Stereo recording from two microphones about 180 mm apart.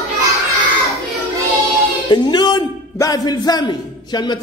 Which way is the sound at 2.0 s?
25° left (ahead or behind).